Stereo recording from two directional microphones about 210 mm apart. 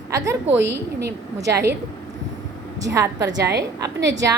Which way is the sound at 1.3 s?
15° right (ahead or behind).